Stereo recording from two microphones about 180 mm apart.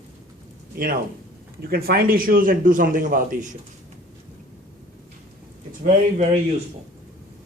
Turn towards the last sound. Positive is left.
turn(degrees=-35)  # may be behind; listen again after turning